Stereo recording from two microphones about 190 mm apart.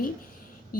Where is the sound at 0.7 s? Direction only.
45° left (ahead or behind).